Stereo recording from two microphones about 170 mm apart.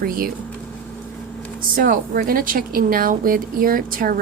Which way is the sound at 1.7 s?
55° right (ahead or behind).